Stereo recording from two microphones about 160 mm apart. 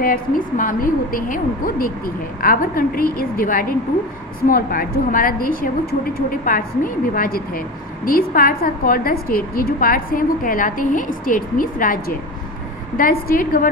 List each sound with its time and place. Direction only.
0.0 s a woman's voice: 60° left (ahead or behind)